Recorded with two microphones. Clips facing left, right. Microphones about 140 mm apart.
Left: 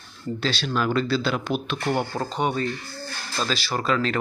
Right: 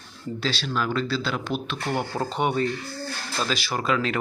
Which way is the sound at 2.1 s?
20° right (ahead or behind).